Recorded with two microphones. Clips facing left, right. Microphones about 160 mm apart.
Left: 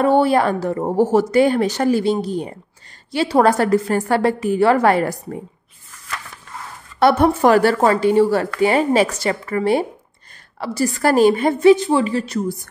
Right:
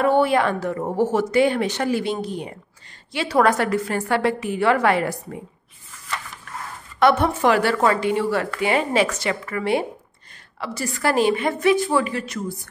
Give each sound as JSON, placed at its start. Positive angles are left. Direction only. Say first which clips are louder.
{"t": 0.0, "sound": "speech", "louder": "left 3 dB", "side_deg": 35}
{"t": 7.0, "sound": "speech", "louder": "left 4 dB", "side_deg": 40}
{"t": 11.7, "sound": "speech", "louder": "left 5 dB", "side_deg": 25}